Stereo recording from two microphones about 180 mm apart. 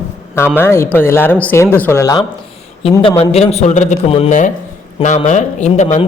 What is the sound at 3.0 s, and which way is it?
A man's voice, 30° left (ahead or behind).